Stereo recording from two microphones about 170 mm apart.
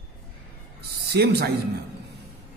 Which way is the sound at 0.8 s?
70° right (ahead or behind).